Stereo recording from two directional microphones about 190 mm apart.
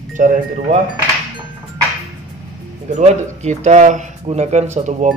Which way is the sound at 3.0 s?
35° right (ahead or behind).